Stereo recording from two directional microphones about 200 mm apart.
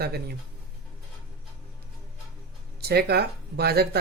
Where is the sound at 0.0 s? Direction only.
50° right (ahead or behind).